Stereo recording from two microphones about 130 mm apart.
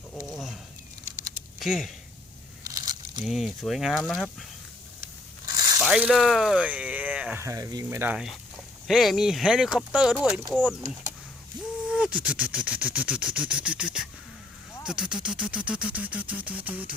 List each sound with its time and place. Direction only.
0.3 s a sound: centre (ahead or behind)
1.5 s speech: 5° right (ahead or behind)
2.6 s crumpling: 30° right (ahead or behind)
3.2 s speech: centre (ahead or behind)
5.5 s a sound: 30° right (ahead or behind)
6.0 s speech: 5° right (ahead or behind)
7.4 s speech: 25° right (ahead or behind)
7.9 s speech: 15° right (ahead or behind)
8.9 s speech: centre (ahead or behind)
11.5 s a sound: 35° right (ahead or behind)
11.9 s speech: 5° right (ahead or behind)